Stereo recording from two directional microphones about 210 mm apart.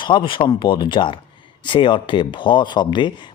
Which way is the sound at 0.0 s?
25° left (ahead or behind).